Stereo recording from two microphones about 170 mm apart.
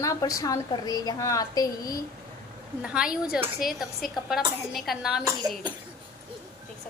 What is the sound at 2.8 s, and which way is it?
A woman's voice, 5° right (ahead or behind).